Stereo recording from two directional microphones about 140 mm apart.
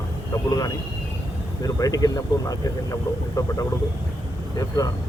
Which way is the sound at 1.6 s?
25° left (ahead or behind).